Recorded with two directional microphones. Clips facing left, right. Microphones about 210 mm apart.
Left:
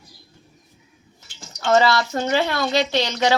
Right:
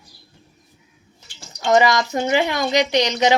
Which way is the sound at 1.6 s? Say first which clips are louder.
Right 1 dB; 15° right (ahead or behind).